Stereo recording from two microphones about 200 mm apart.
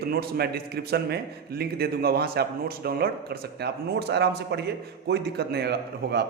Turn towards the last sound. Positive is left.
turn(degrees=-55)  # may be behind; listen again after turning